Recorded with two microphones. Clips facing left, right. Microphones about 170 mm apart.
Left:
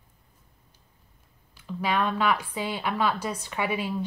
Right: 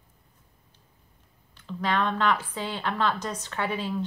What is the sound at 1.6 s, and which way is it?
A woman's voice, 10° left (ahead or behind).